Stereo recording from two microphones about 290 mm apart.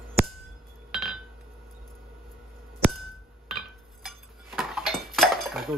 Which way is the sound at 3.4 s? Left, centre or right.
Centre.